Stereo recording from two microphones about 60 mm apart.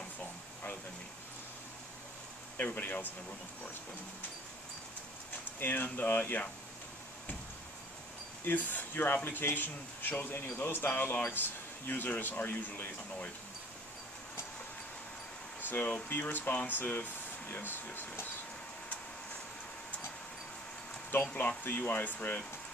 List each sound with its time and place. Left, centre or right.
2.5 s speech: left
5.6 s speech: left
8.5 s speech: left
15.6 s speech: left
21.1 s speech: left